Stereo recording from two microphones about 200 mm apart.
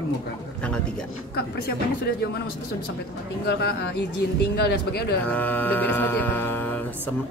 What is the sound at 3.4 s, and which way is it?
Speech, 55° left (ahead or behind).